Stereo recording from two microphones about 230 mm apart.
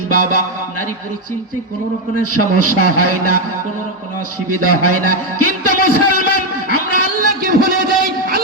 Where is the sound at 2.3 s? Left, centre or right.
Right.